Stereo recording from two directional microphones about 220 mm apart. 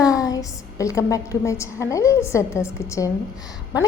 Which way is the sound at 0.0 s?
15° left (ahead or behind).